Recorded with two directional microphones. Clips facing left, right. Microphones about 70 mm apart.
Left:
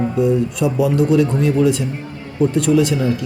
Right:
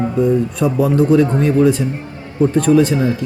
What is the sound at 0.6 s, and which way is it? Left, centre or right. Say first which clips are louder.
Speech: right 2 dB; right.